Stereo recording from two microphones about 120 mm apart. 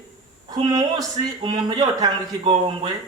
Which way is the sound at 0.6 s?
30° right (ahead or behind).